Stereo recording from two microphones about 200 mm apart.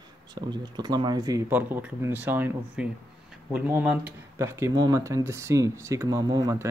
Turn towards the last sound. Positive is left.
turn(degrees=-15)  # may be behind; listen again after turning